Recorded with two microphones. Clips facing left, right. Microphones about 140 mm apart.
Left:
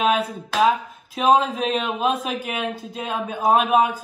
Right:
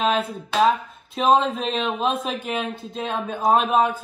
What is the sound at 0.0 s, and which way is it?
Speech, 5° left (ahead or behind).